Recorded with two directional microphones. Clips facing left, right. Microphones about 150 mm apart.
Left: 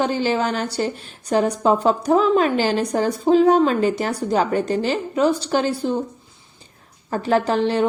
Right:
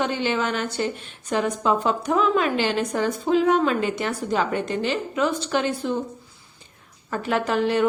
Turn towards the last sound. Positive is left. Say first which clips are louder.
# left 2 dB
turn(degrees=30)  # may be behind; listen again after turning